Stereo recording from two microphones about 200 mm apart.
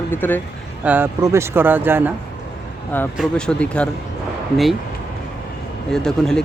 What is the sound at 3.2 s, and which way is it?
Speech, 5° left (ahead or behind).